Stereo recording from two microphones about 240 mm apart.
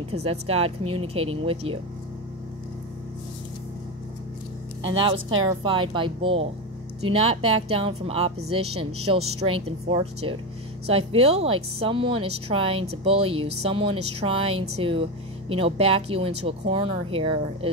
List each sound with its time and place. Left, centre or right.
0.1 s speech: right
4.8 s speech: right